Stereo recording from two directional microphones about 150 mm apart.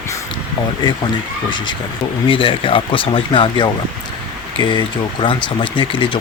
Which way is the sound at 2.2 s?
35° left (ahead or behind).